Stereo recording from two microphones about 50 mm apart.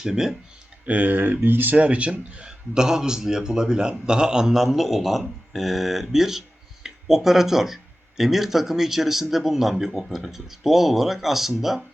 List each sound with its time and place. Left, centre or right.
0.0 s a man's voice: centre
0.9 s speech: right
1.7 s a man's voice: right; by 11.8 s centre